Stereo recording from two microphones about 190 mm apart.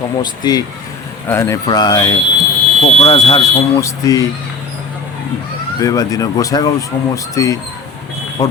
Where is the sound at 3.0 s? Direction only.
30° left (ahead or behind).